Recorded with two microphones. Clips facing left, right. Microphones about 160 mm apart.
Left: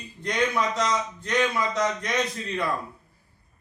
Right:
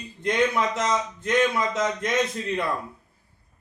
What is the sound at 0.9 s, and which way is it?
A man's voice, 25° right (ahead or behind).